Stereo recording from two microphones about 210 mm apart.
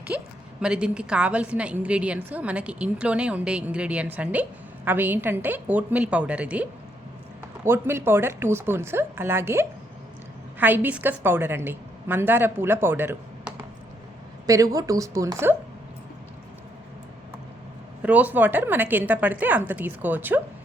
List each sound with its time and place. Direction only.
0.1 s a woman's voice: 5° right (ahead or behind)
18.0 s a woman's voice: 5° right (ahead or behind)